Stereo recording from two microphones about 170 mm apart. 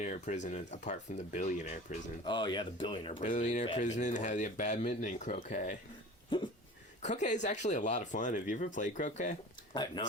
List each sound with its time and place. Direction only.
0.0 s speech: 45° left (ahead or behind)
2.2 s speech: 25° left (ahead or behind)
3.2 s speech: 45° left (ahead or behind)
7.0 s speech: 45° left (ahead or behind)
10.0 s speech: 25° left (ahead or behind)